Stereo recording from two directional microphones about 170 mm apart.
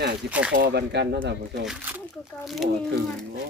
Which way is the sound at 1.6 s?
5° right (ahead or behind).